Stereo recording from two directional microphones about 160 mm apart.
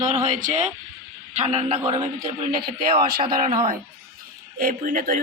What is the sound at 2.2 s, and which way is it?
Speech, 65° right (ahead or behind).